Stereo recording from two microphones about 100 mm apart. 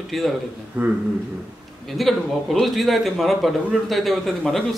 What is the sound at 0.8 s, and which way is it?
Speech, 20° right (ahead or behind).